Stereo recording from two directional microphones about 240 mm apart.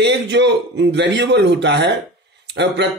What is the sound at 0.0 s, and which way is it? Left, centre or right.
Speech, right.